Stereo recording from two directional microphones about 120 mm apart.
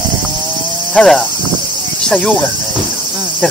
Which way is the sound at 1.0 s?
5° left (ahead or behind).